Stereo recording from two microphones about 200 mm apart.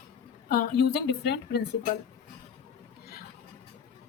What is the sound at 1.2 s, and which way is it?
Speech, 55° left (ahead or behind).